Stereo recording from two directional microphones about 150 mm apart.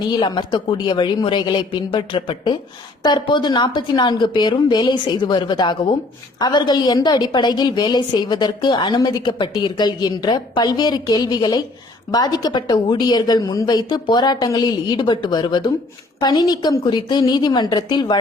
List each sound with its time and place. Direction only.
0.1 s a woman's voice: 30° left (ahead or behind)